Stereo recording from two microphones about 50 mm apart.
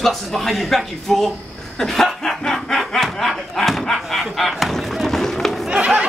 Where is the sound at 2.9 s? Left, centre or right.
Centre.